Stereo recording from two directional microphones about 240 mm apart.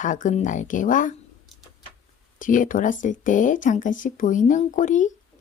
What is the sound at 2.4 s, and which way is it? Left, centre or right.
Speech, left.